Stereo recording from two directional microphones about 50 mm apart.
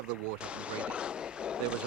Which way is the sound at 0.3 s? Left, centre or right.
Right.